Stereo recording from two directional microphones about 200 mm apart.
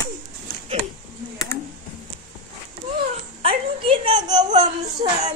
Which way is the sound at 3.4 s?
25° right (ahead or behind).